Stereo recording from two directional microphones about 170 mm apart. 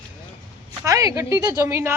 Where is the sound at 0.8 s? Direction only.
20° right (ahead or behind).